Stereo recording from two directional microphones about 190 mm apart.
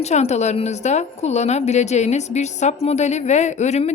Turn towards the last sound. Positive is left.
turn(degrees=35)  # may be behind; listen again after turning